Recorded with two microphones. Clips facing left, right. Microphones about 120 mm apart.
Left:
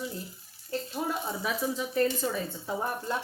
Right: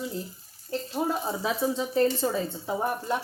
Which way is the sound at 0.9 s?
30° right (ahead or behind).